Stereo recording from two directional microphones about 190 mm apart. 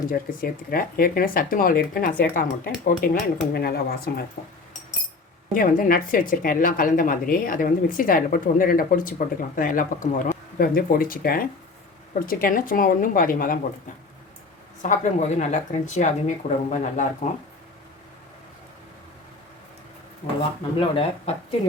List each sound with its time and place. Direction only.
0.1 s a woman's voice: 50° left (ahead or behind)
5.5 s a woman's voice: 50° left (ahead or behind)
14.8 s speech: 40° left (ahead or behind)
20.7 s speech: 30° left (ahead or behind)